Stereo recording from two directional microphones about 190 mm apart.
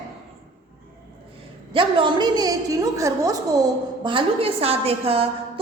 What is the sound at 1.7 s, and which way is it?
A woman's voice, 25° right (ahead or behind).